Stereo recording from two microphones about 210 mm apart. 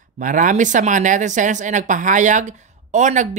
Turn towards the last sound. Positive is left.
turn(degrees=-35)  # may be behind; listen again after turning